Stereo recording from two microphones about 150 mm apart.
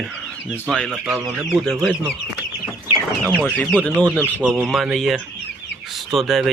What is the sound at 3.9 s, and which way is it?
Speech, 10° right (ahead or behind).